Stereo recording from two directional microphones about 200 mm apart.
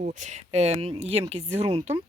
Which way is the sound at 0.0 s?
40° right (ahead or behind).